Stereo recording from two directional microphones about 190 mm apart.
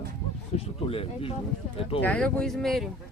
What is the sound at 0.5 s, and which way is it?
Speech, 30° left (ahead or behind).